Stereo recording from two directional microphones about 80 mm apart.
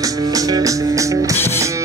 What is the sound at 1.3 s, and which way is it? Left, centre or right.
Music, left.